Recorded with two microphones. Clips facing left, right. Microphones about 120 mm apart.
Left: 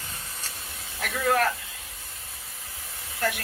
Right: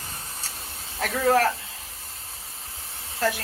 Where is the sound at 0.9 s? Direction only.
35° right (ahead or behind).